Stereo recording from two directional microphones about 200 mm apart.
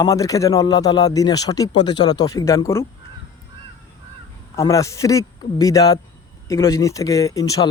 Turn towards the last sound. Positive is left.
turn(degrees=15)  # may be behind; listen again after turning